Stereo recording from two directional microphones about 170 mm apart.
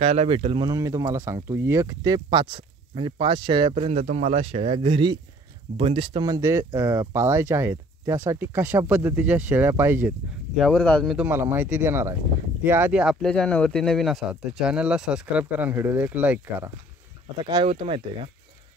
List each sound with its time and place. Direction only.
0.0 s speech: 35° right (ahead or behind)
0.7 s speech: 20° right (ahead or behind)
4.0 s speech: 50° right (ahead or behind); by 10.1 s 10° right (ahead or behind)
10.5 s speech: 5° left (ahead or behind)
11.1 s speech: 10° right (ahead or behind)
17.5 s speech: 30° right (ahead or behind)